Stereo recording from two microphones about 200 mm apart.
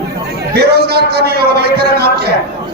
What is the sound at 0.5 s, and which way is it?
A man's voice, 55° right (ahead or behind).